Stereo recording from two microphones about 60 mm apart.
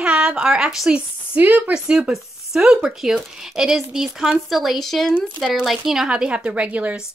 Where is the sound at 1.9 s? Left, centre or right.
Centre.